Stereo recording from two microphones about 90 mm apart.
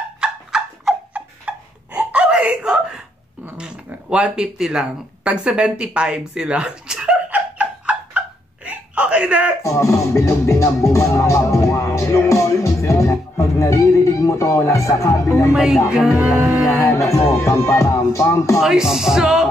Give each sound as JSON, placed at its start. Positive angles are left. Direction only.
{"t": 0.2, "sound": "dog", "side_deg": -10}
{"t": 2.0, "sound": "whimper", "side_deg": -10}
{"t": 3.5, "sound": "a sound", "side_deg": -10}
{"t": 9.6, "sound": "music", "side_deg": 35}
{"t": 15.5, "sound": "speech", "side_deg": -5}
{"t": 16.8, "sound": "music", "side_deg": 30}
{"t": 18.6, "sound": "speech", "side_deg": -5}